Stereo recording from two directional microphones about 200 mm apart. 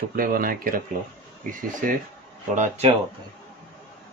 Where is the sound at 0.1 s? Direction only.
45° right (ahead or behind).